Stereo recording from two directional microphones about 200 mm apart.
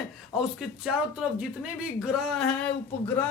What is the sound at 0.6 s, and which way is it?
Speech, centre (ahead or behind).